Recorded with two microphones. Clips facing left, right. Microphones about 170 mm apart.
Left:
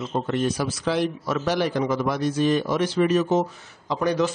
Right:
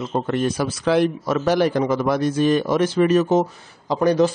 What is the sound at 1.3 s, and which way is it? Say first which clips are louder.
Speech: right 5 dB; 50° right (ahead or behind).